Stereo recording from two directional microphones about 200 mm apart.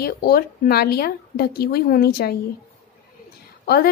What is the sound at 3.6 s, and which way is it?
Speech, 50° left (ahead or behind).